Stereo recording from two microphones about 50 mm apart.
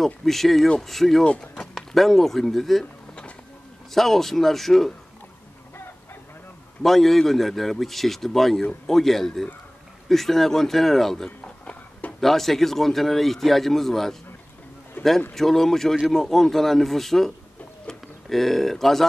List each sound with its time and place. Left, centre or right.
0.0 s a man's voice: centre
1.2 s speech: left
1.5 s speech: centre
2.8 s a sound: centre
3.9 s a man's voice: centre
6.8 s a man's voice: centre
11.2 s a sound: left
12.2 s a man's voice: centre
15.0 s a sound: left
15.3 s a man's voice: centre